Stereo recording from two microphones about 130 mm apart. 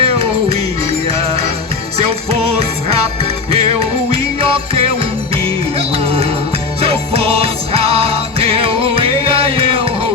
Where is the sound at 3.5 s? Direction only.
50° right (ahead or behind).